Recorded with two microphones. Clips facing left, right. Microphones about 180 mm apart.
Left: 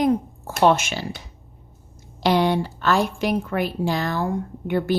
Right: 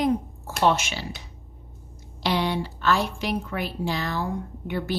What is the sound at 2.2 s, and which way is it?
Speech, 45° left (ahead or behind).